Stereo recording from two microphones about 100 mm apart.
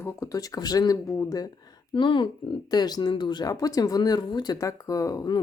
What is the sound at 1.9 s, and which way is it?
Speech, 55° left (ahead or behind).